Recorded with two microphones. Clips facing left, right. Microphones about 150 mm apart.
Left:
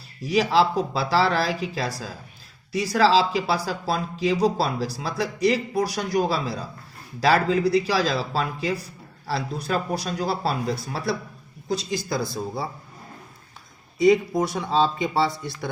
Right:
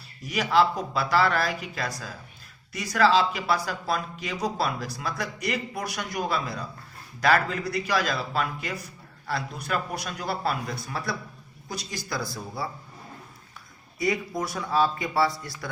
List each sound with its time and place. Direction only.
0.2 s speech: 30° left (ahead or behind)
14.0 s speech: 25° left (ahead or behind)